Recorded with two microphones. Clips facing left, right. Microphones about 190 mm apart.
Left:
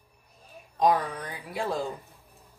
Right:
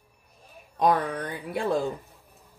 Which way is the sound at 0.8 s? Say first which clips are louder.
Right 1 dB; 60° right (ahead or behind).